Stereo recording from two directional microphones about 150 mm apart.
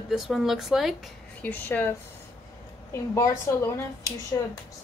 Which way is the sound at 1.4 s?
10° left (ahead or behind).